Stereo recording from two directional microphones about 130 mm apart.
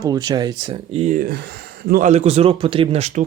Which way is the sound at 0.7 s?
50° right (ahead or behind).